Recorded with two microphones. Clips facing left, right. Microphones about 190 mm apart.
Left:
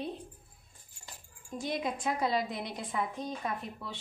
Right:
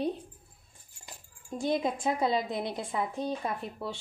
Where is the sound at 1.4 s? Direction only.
25° right (ahead or behind).